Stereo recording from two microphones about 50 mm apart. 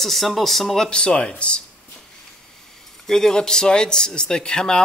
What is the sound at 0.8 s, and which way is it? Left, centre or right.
Speech, centre.